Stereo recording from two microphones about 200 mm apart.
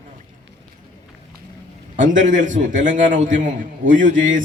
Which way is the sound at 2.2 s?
40° right (ahead or behind).